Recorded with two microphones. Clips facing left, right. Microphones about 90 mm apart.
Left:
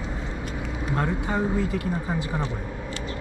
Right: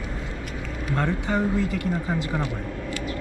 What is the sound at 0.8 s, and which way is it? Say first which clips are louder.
Speech: right 1 dB; 15° left (ahead or behind).